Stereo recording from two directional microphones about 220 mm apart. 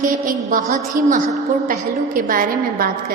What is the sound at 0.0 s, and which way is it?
A woman's voice, 40° right (ahead or behind).